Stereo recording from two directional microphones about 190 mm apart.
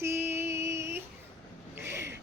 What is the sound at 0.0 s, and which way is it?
Music, 10° right (ahead or behind).